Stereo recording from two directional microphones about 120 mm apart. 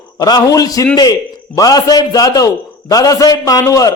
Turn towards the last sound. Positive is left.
turn(degrees=30)  # may be behind; listen again after turning